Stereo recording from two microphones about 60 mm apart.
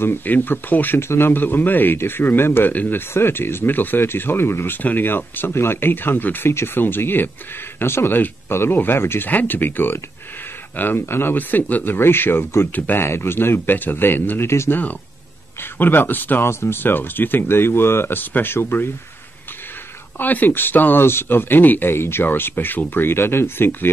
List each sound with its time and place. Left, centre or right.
0.0 s speech: left
3.1 s speech: left
16.4 s speech: left
20.2 s speech: left